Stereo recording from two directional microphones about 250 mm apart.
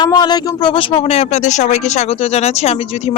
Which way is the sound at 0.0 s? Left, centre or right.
Centre.